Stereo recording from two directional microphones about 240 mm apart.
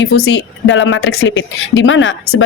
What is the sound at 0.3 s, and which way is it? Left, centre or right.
Speech, left.